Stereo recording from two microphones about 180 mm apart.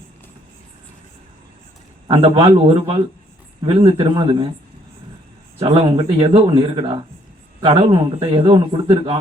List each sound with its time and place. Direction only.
2.0 s a man's voice: 30° right (ahead or behind)
5.5 s a man's voice: 30° right (ahead or behind)